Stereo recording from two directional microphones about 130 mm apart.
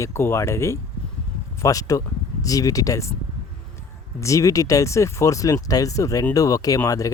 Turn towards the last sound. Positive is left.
turn(degrees=25)  # may be behind; listen again after turning